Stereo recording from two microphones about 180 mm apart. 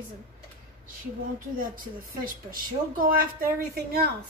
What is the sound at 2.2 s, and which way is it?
A woman's voice, 50° right (ahead or behind).